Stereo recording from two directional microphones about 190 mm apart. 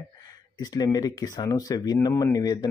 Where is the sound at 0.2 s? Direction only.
20° left (ahead or behind).